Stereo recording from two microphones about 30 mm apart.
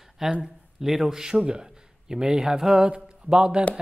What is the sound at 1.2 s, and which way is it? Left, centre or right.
Speech, right.